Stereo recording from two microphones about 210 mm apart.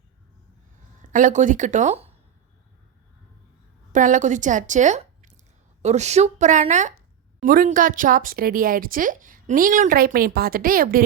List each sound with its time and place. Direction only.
1.1 s speech: 35° right (ahead or behind)
3.9 s a woman's voice: 35° right (ahead or behind)